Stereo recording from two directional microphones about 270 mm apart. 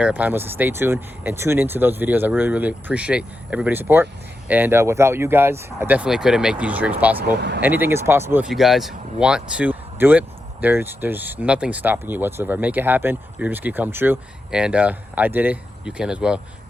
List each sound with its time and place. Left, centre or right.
0.0 s speech: centre
7.3 s speech: right
7.6 s speech: centre